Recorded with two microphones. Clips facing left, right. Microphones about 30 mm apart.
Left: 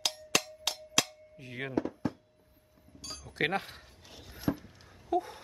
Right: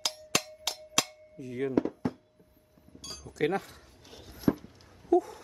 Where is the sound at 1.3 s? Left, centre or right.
Left.